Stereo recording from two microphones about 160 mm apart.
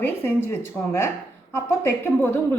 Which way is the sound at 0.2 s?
15° left (ahead or behind).